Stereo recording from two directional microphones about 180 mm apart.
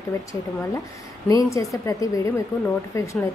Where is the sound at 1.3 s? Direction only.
20° left (ahead or behind).